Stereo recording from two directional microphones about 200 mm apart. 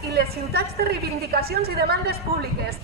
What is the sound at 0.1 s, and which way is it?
A woman's voice, 50° right (ahead or behind).